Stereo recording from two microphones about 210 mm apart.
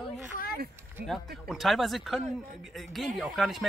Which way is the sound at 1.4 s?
Centre (ahead or behind).